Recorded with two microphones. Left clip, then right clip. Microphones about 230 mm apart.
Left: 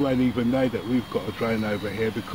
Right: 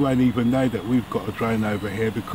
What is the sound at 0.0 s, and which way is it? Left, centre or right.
Speech, right.